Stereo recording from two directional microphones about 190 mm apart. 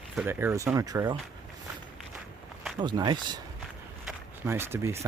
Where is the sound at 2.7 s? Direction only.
20° right (ahead or behind).